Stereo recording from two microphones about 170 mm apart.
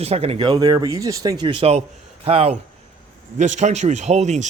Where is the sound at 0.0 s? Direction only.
35° right (ahead or behind).